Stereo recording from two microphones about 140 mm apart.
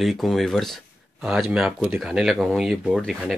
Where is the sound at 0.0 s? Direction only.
Centre (ahead or behind).